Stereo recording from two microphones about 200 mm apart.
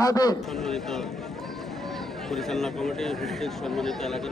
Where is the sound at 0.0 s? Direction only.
20° left (ahead or behind).